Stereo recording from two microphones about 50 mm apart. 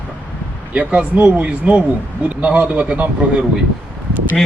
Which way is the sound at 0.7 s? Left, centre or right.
Right.